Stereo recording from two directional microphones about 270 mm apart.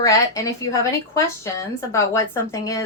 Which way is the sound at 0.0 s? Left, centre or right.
Centre.